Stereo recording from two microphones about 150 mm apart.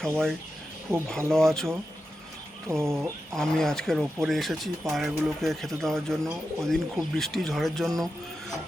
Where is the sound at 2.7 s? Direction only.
20° right (ahead or behind).